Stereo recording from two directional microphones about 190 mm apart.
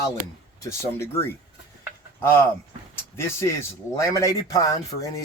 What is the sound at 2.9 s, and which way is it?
Speech, 15° left (ahead or behind).